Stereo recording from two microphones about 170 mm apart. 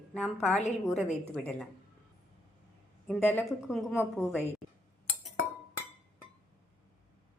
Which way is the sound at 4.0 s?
15° left (ahead or behind).